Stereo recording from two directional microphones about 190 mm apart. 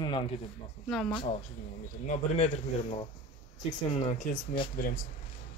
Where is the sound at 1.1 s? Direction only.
35° left (ahead or behind).